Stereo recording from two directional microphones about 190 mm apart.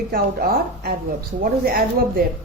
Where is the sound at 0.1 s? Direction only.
55° right (ahead or behind).